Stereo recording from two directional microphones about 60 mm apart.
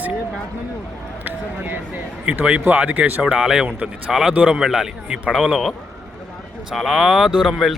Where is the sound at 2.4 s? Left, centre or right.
Right.